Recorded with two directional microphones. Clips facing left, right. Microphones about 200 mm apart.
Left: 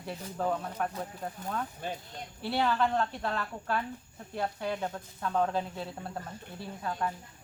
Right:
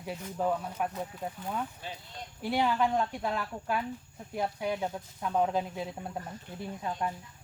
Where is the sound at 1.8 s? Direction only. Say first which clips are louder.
Left 5 dB; 50° left (ahead or behind).